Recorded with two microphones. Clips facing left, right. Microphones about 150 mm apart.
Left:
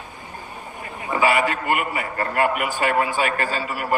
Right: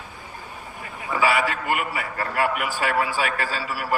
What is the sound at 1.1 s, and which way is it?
A man's voice, 50° left (ahead or behind).